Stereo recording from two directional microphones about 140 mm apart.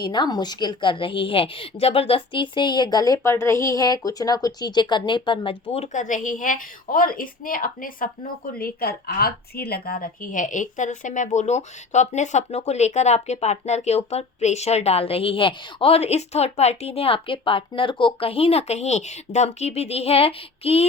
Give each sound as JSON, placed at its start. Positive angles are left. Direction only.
{"t": 0.0, "sound": "a woman's voice", "side_deg": 30}
{"t": 5.7, "sound": "a woman's voice", "side_deg": 55}